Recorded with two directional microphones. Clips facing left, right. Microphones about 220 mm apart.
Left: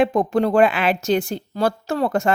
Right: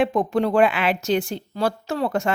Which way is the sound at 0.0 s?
40° left (ahead or behind).